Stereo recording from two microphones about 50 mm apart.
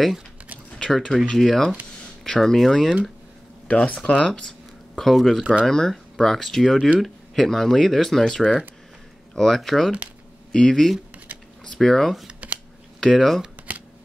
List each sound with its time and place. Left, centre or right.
0.7 s speech: centre
3.6 s speech: left
4.3 s a sound: centre
5.1 s speech: centre
5.4 s speech: right
5.7 s speech: centre
10.5 s speech: centre